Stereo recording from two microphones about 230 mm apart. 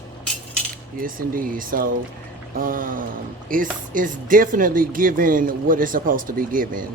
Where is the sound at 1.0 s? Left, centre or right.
Right.